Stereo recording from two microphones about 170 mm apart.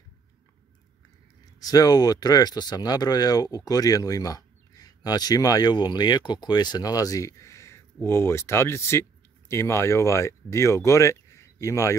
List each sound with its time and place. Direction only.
1.4 s speech: 20° left (ahead or behind)